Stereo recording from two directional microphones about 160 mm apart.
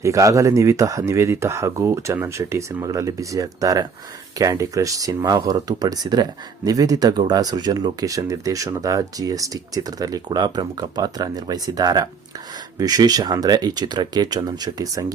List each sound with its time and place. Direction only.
0.0 s speech: 20° right (ahead or behind)